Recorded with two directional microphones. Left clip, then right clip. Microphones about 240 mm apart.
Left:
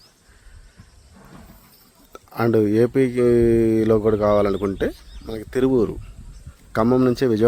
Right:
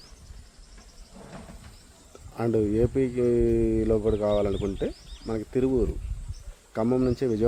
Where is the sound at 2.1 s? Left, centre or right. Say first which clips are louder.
Left 7 dB; left.